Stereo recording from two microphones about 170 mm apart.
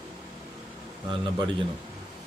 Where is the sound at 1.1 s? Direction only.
25° right (ahead or behind).